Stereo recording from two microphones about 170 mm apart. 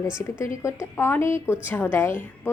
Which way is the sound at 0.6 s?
15° left (ahead or behind).